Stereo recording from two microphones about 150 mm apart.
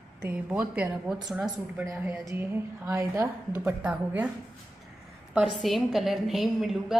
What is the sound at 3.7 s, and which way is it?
Speech, 10° right (ahead or behind).